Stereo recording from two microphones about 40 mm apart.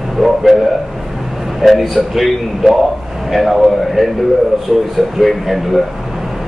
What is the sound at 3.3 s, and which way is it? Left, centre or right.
Speech, centre.